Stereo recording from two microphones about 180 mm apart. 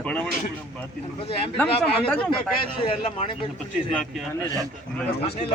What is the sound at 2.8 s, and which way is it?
Speech, 30° left (ahead or behind).